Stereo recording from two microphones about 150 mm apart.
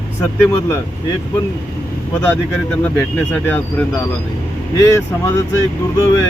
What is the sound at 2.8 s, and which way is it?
Speech, 10° left (ahead or behind).